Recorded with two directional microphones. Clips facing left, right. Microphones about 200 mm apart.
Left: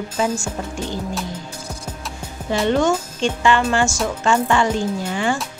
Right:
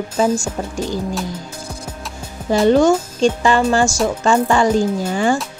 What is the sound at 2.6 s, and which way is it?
Speech, 35° right (ahead or behind).